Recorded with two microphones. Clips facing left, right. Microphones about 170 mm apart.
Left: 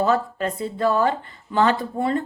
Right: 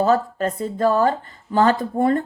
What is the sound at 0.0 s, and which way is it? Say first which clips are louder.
Speech: right 2 dB; 40° right (ahead or behind).